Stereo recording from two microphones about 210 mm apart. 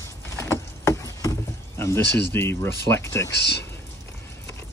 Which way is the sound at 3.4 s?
50° left (ahead or behind).